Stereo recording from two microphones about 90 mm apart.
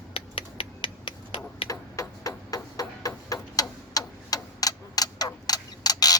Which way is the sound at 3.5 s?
45° left (ahead or behind).